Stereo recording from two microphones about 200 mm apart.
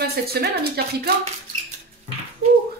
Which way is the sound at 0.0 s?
50° right (ahead or behind).